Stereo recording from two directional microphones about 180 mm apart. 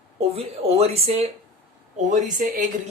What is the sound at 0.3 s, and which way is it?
A man's voice, 35° right (ahead or behind).